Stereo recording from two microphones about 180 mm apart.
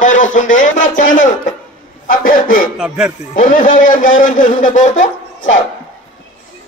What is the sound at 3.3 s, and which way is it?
A man's voice, 50° left (ahead or behind).